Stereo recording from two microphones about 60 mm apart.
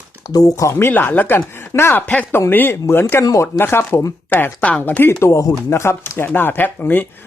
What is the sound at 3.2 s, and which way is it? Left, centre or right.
Speech, left.